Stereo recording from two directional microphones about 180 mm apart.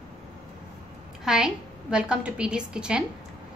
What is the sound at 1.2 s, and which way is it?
A woman's voice, 5° right (ahead or behind).